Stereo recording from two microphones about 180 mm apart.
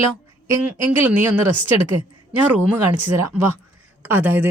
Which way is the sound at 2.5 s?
10° right (ahead or behind).